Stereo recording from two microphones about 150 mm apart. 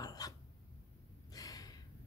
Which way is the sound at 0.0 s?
25° left (ahead or behind).